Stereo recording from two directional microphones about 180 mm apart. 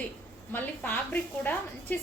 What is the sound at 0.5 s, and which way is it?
A woman's voice, 10° left (ahead or behind).